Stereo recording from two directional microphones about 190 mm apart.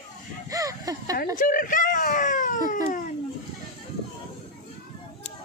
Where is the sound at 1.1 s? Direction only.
45° left (ahead or behind).